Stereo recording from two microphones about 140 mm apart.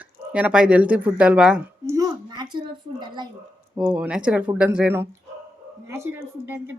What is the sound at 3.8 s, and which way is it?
Speech, 10° right (ahead or behind).